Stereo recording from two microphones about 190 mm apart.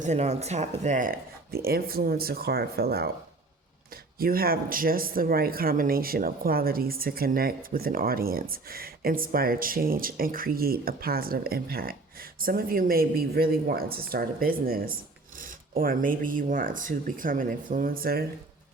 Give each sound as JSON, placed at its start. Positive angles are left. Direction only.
{"t": 0.0, "sound": "speech", "side_deg": -35}
{"t": 4.2, "sound": "speech", "side_deg": -50}